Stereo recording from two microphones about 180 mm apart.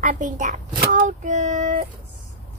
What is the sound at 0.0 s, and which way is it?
A child's voice, 45° right (ahead or behind).